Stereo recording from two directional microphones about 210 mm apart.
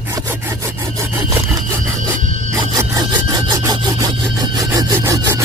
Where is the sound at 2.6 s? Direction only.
15° right (ahead or behind).